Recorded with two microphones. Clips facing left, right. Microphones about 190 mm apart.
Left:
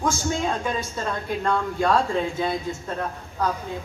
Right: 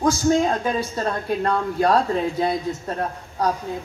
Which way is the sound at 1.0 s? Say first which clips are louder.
Right 3 dB; 35° right (ahead or behind).